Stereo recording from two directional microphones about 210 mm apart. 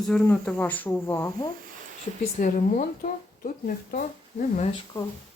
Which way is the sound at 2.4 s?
40° left (ahead or behind).